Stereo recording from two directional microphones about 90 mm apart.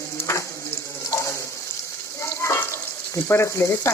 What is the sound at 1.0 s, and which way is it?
Water, 35° left (ahead or behind).